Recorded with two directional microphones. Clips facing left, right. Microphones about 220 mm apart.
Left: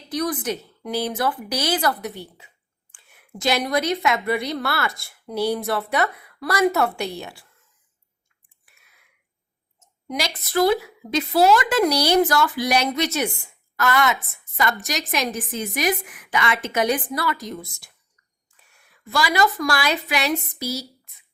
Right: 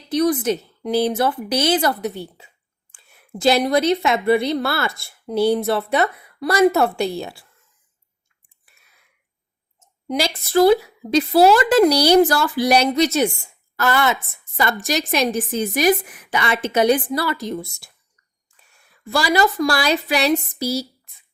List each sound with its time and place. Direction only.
0.1 s a woman's voice: 25° right (ahead or behind)
10.1 s a woman's voice: 30° right (ahead or behind)
19.1 s a woman's voice: 30° right (ahead or behind)